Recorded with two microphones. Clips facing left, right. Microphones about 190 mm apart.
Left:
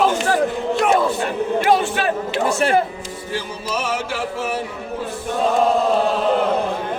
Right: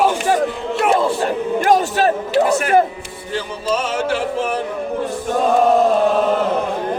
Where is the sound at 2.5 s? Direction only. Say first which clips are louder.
Right 1 dB; 25° left (ahead or behind).